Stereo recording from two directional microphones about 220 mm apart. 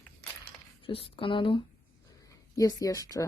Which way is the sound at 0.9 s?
25° left (ahead or behind).